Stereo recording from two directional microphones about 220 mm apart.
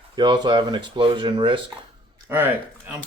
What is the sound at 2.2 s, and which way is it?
Speech, 10° right (ahead or behind).